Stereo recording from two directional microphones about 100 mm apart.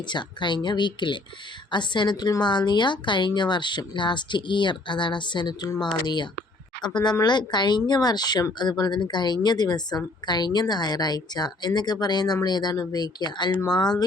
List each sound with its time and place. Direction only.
0.1 s speech: 50° left (ahead or behind)